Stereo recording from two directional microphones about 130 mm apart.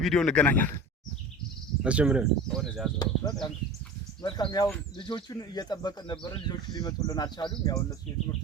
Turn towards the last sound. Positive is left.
turn(degrees=30)  # may be behind; listen again after turning